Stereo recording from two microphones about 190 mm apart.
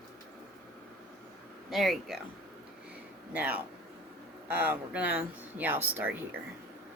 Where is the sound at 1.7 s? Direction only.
Centre (ahead or behind).